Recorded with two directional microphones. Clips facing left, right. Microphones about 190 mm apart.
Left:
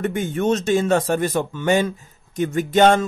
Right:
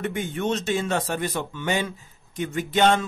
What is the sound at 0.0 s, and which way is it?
Speech, 45° left (ahead or behind).